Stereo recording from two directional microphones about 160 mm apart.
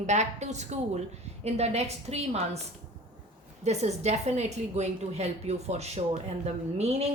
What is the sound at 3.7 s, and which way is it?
A woman's voice, 45° right (ahead or behind).